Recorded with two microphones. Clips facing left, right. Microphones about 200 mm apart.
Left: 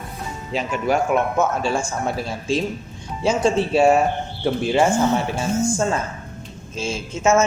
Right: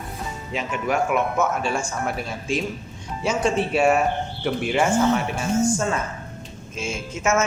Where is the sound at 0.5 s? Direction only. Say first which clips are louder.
Left 3 dB; 30° left (ahead or behind).